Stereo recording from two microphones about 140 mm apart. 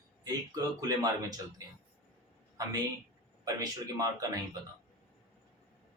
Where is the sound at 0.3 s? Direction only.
25° right (ahead or behind).